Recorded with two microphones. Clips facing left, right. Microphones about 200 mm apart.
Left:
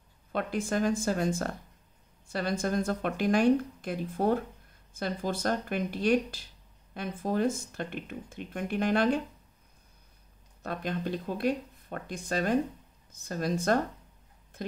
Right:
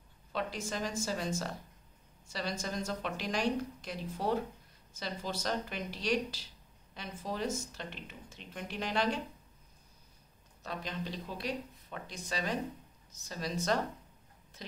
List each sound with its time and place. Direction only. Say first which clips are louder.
0.3 s speech: left 7 dB; 55° left (ahead or behind)
10.6 s speech: left 7 dB; 55° left (ahead or behind)